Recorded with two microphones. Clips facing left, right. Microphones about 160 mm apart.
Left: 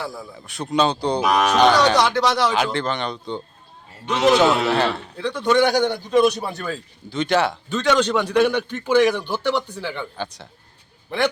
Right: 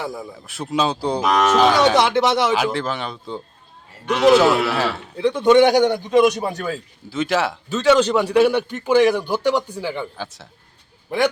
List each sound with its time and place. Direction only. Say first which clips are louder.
0.0 s speech: right 2 dB; 20° right (ahead or behind)
0.3 s speech: left 2 dB; centre (ahead or behind)
1.3 s speech: right 2 dB; 15° left (ahead or behind)
1.5 s speech: even; 5° right (ahead or behind)
2.0 s speech: right 2 dB; 25° right (ahead or behind)
2.5 s speech: right 1 dB; 5° right (ahead or behind)
5.1 s a man's voice: right 7 dB; 20° right (ahead or behind); by 10.5 s centre (ahead or behind)